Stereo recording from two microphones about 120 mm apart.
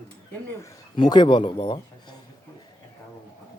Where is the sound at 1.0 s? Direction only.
40° left (ahead or behind).